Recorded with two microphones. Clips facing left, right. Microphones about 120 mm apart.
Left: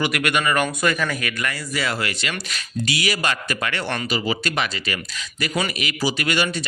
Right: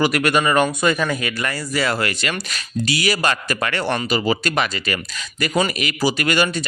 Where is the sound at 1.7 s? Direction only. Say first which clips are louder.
Right 6 dB; 40° right (ahead or behind).